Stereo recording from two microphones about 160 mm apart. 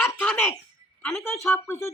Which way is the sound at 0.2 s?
10° left (ahead or behind).